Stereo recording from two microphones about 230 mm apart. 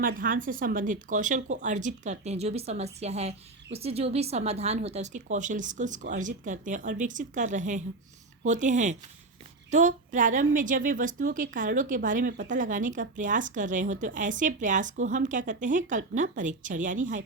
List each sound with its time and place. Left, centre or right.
0.2 s a woman's voice: right